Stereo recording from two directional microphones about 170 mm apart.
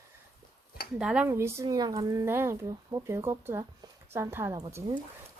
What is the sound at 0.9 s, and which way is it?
A woman's voice, 5° right (ahead or behind).